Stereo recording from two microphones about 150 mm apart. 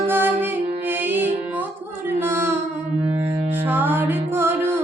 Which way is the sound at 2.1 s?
15° right (ahead or behind).